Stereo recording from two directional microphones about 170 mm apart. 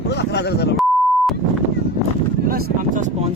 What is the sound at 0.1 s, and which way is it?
Speech, 85° left.